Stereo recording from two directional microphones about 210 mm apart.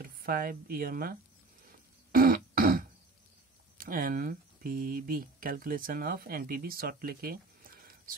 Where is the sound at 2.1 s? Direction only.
40° right (ahead or behind).